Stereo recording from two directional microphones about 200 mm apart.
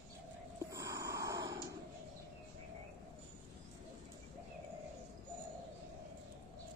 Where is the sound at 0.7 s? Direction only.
15° right (ahead or behind).